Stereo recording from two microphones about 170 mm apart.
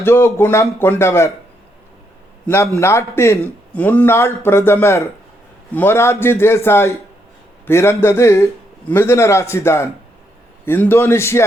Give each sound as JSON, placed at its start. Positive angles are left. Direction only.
{"t": 0.0, "sound": "speech", "side_deg": 15}
{"t": 2.7, "sound": "speech", "side_deg": 15}